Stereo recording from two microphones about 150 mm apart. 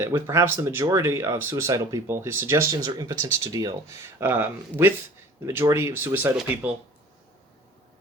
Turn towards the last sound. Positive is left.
turn(degrees=-15)  # may be behind; listen again after turning